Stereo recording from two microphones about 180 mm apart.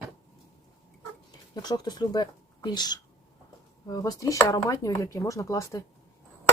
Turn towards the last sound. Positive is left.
turn(degrees=15)  # may be behind; listen again after turning